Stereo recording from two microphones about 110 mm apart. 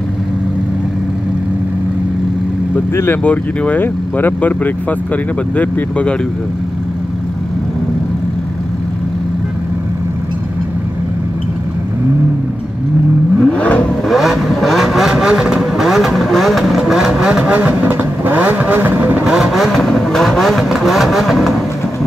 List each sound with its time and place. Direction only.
3.0 s speech: 15° left (ahead or behind)
13.4 s vehicle: 10° left (ahead or behind)
14.0 s vehicle: centre (ahead or behind)